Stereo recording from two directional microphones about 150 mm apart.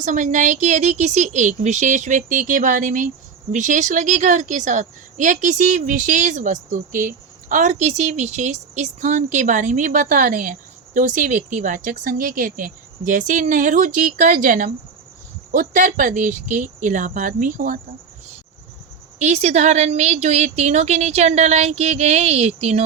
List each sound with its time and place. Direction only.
0.0 s speech: 60° right (ahead or behind)
19.2 s speech: 50° right (ahead or behind)